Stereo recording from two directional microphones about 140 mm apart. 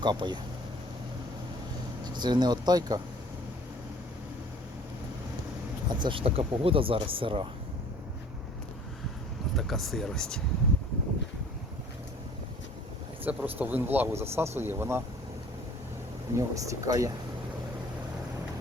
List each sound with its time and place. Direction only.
0.0 s speech: 30° right (ahead or behind)
2.0 s speech: 30° right (ahead or behind)
5.9 s speech: 35° right (ahead or behind)
9.6 s speech: centre (ahead or behind)
13.2 s speech: 15° right (ahead or behind)
16.3 s speech: 25° right (ahead or behind)